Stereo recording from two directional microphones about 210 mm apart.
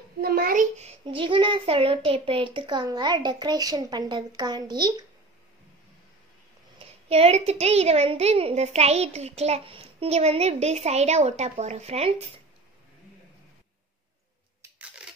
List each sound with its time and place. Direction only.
0.2 s a child's voice: 45° right (ahead or behind); by 5.0 s 20° right (ahead or behind)
6.8 s a woman's voice: 30° right (ahead or behind)